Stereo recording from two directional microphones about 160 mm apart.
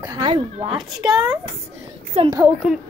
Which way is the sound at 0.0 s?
30° right (ahead or behind).